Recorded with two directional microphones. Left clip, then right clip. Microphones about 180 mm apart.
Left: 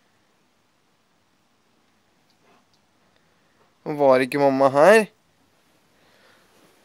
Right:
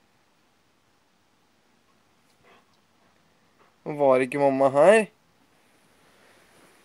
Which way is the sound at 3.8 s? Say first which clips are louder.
Left 3 dB; 15° left (ahead or behind).